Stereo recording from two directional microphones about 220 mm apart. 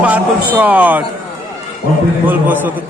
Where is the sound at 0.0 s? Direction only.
5° right (ahead or behind).